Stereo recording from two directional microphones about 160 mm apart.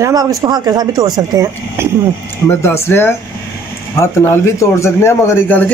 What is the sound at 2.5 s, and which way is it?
Speech, 15° left (ahead or behind).